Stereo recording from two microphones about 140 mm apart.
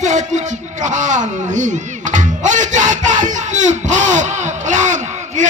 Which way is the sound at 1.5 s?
60° right (ahead or behind).